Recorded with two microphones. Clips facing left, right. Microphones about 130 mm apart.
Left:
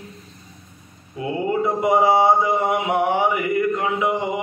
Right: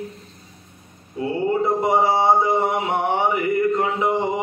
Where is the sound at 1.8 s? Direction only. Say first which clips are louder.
Left 3 dB; 30° right (ahead or behind).